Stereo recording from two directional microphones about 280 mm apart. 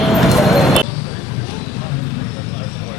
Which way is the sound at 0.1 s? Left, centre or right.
Centre.